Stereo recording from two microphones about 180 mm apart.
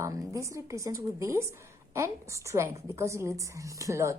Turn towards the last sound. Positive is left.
turn(degrees=-15)  # may be behind; listen again after turning